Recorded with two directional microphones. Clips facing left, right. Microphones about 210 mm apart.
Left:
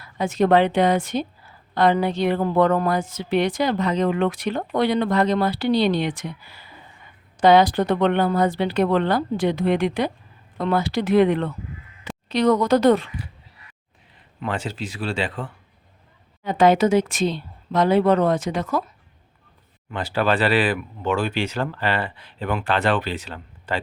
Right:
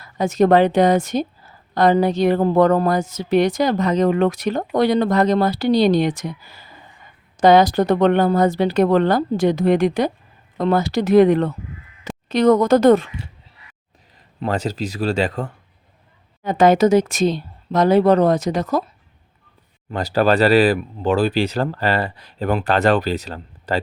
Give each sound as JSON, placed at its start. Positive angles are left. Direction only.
{"t": 0.0, "sound": "a woman's voice", "side_deg": -40}
{"t": 14.4, "sound": "a woman's voice", "side_deg": -40}
{"t": 19.9, "sound": "a woman's voice", "side_deg": -40}